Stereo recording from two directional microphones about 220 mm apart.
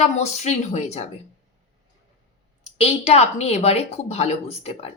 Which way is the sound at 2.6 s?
30° left (ahead or behind).